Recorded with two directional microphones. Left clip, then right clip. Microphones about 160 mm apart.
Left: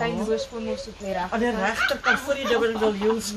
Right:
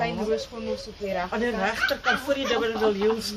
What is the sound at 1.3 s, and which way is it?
Speech, 20° right (ahead or behind).